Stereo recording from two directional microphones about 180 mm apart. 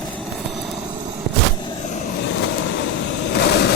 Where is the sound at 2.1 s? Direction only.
75° left (ahead or behind).